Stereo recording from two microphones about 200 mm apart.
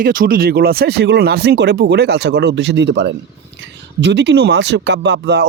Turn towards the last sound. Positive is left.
turn(degrees=-55)  # may be behind; listen again after turning